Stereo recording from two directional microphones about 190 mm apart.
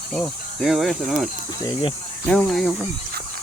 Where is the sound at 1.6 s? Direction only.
25° left (ahead or behind).